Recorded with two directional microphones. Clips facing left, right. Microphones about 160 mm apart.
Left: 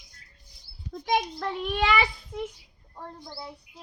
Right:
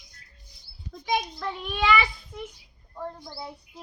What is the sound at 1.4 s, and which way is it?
Speech, 65° left (ahead or behind).